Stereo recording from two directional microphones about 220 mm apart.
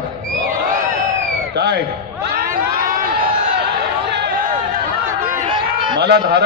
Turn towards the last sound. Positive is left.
turn(degrees=-50)  # may be behind; listen again after turning